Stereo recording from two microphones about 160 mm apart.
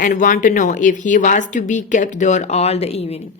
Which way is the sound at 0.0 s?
55° left (ahead or behind).